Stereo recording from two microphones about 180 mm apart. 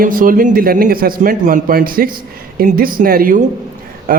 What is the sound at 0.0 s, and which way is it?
Speech, 50° right (ahead or behind).